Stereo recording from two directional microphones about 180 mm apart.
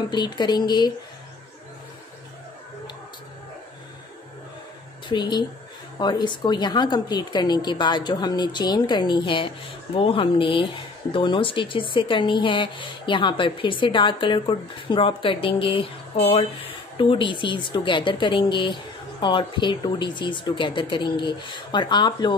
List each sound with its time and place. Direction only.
0.1 s speech: 25° left (ahead or behind)
5.0 s speech: 25° left (ahead or behind)